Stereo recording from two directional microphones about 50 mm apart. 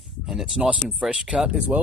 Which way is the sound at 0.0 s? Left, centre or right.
Centre.